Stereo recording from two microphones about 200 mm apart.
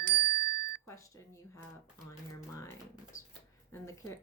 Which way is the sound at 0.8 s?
15° left (ahead or behind).